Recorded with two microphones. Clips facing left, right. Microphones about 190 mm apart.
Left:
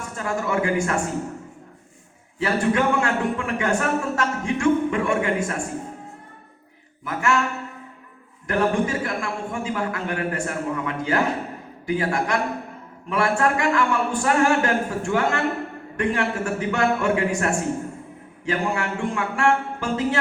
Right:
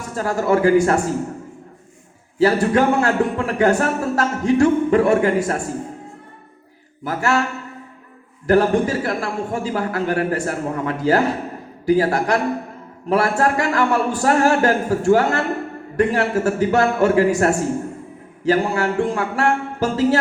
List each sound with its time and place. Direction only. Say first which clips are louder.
0.2 s a man's voice: right 7 dB; 35° right (ahead or behind)
2.4 s a man's voice: right 5 dB; 40° right (ahead or behind)
7.0 s a man's voice: right 3 dB; 35° right (ahead or behind)
8.4 s a man's voice: right 6 dB; 35° right (ahead or behind)